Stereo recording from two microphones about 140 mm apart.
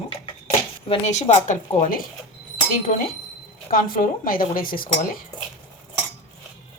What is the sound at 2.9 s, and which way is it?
Speech, 60° left (ahead or behind).